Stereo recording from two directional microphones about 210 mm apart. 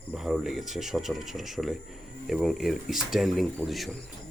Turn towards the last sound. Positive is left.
turn(degrees=0)  # may be behind; listen again after turning